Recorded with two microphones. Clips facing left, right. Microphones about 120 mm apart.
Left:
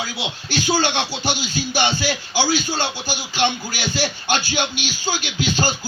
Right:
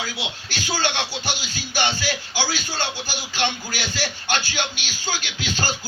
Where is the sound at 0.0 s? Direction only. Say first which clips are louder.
Left 3 dB; 15° left (ahead or behind).